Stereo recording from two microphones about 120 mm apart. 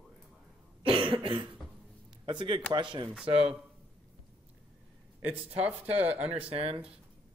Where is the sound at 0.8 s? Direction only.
50° right (ahead or behind).